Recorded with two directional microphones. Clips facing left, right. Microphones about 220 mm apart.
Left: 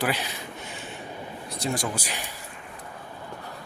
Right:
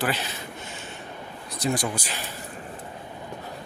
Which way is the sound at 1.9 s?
10° left (ahead or behind).